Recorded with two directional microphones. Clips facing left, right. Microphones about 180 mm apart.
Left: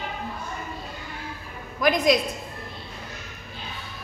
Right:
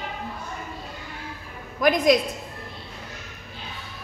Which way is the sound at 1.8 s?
50° right (ahead or behind).